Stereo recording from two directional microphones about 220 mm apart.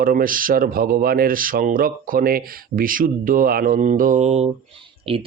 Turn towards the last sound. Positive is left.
turn(degrees=-25)  # may be behind; listen again after turning